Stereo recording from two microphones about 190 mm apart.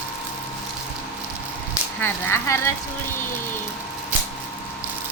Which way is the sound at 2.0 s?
10° left (ahead or behind).